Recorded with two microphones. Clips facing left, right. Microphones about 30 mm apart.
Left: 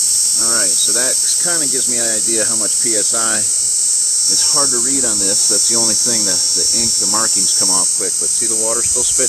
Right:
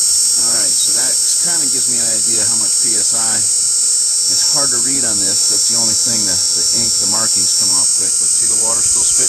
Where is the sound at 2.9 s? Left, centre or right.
Centre.